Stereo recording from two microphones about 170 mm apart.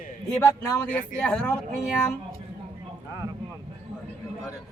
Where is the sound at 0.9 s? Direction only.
50° left (ahead or behind).